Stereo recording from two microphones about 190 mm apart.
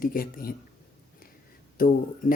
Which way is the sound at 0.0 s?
50° left (ahead or behind).